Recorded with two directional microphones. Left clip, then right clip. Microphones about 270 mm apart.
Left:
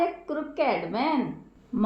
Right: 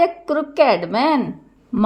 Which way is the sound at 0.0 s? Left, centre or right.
Right.